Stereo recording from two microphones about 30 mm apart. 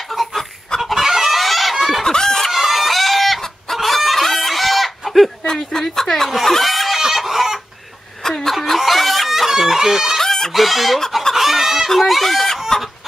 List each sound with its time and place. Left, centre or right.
0.7 s fowl: centre
1.0 s chicken: centre
2.0 s chicken: left
2.5 s chicken: centre
5.5 s speech: centre
6.4 s chicken: centre
8.7 s chicken: centre
9.5 s chicken: centre
10.2 s chicken: centre
10.5 s chicken: centre
11.9 s chicken: centre